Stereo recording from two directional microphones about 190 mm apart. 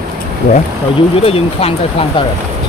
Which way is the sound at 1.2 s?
30° left (ahead or behind).